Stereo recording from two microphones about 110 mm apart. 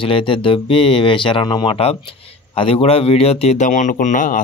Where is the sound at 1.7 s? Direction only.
65° left (ahead or behind); by 3.9 s 90° left.